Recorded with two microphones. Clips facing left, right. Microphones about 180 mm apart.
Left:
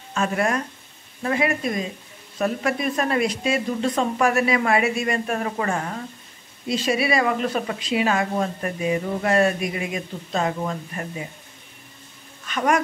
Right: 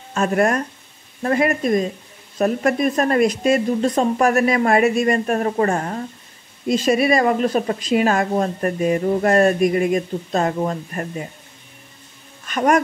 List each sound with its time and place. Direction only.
0.1 s a woman's voice: 45° right (ahead or behind)
12.4 s speech: 45° right (ahead or behind)